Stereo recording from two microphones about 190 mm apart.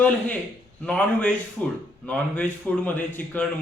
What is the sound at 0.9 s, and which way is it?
Speech, 5° left (ahead or behind).